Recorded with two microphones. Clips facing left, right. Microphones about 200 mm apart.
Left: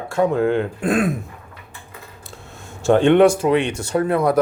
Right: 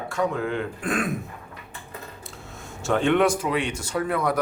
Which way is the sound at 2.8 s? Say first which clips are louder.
Left 8 dB; 30° left (ahead or behind).